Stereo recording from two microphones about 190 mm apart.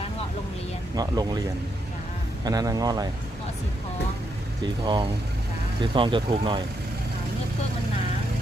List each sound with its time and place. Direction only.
0.9 s speech: 20° right (ahead or behind)
2.4 s speech: 20° right (ahead or behind)
4.6 s speech: 25° right (ahead or behind)